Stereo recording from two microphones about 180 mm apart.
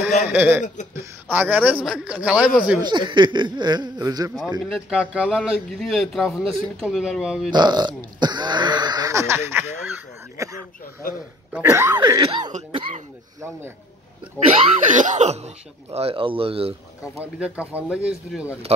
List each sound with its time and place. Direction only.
0.3 s a man's voice: 10° right (ahead or behind)
2.8 s speech: 25° right (ahead or behind)
4.6 s a man's voice: centre (ahead or behind)
7.5 s speech: 25° right (ahead or behind)
12.5 s speech: 40° right (ahead or behind)
14.9 s speech: 45° right (ahead or behind)
17.2 s a man's voice: 5° right (ahead or behind)